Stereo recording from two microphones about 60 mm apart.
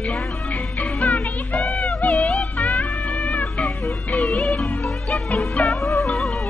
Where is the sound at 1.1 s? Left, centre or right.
Left.